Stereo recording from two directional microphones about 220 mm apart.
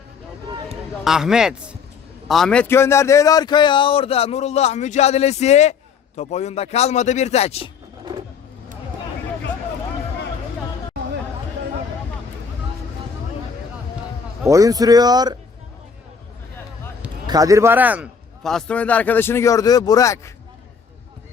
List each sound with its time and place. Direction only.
1.0 s a man's voice: centre (ahead or behind); by 7.7 s 30° left (ahead or behind)
14.4 s a man's voice: 15° right (ahead or behind)
17.2 s a man's voice: 15° right (ahead or behind); by 20.3 s 15° left (ahead or behind)